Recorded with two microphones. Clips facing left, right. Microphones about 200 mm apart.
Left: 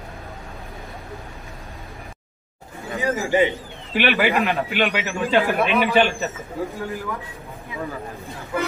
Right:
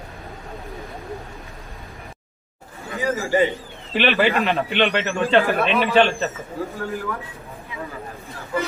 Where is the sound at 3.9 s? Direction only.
10° left (ahead or behind).